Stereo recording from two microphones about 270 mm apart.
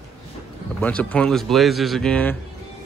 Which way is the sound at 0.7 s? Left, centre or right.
Centre.